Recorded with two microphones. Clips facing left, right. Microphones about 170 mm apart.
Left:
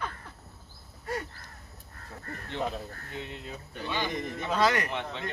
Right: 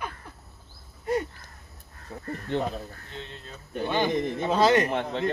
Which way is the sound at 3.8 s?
50° right (ahead or behind).